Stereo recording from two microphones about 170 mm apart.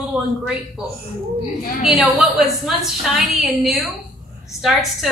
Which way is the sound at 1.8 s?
Centre (ahead or behind).